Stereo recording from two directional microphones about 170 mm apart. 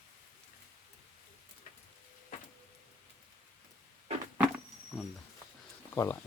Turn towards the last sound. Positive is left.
turn(degrees=15)  # may be behind; listen again after turning